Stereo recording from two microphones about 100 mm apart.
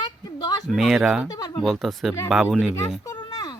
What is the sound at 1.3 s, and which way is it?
Speech, 40° left (ahead or behind).